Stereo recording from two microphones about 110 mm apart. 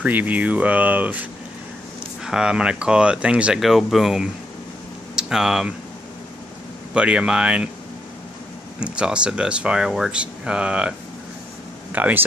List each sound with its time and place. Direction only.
0.0 s speech: 15° right (ahead or behind)
2.2 s speech: 5° right (ahead or behind)
6.9 s speech: 10° right (ahead or behind)
8.7 s speech: 10° right (ahead or behind)